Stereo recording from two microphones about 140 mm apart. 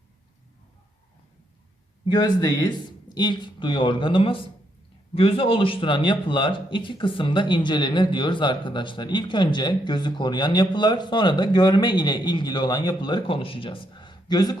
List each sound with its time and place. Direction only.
2.0 s a man's voice: 30° left (ahead or behind)